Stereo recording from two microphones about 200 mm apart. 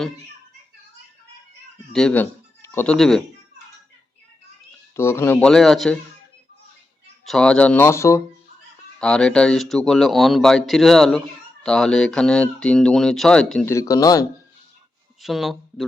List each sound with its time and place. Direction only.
1.9 s speech: 5° left (ahead or behind)
4.9 s speech: 15° left (ahead or behind)
7.3 s speech: 5° left (ahead or behind)
9.0 s speech: 5° left (ahead or behind)
13.7 s speech: 15° left (ahead or behind)
15.2 s speech: centre (ahead or behind)